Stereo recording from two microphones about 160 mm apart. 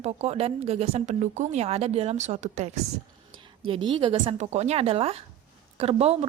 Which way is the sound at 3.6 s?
30° right (ahead or behind).